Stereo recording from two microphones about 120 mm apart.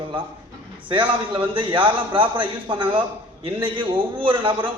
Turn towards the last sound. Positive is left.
turn(degrees=-45)  # may be behind; listen again after turning